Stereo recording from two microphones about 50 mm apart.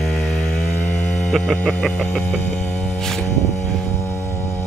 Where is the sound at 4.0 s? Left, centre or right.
Left.